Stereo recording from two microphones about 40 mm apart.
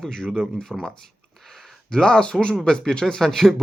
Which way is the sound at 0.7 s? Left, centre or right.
Centre.